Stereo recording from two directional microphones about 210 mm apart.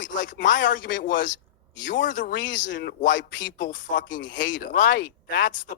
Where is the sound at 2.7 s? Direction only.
60° left (ahead or behind).